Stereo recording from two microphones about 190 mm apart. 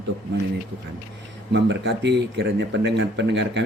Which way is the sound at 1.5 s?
65° right (ahead or behind).